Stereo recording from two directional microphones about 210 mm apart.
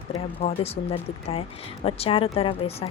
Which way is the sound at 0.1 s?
30° left (ahead or behind).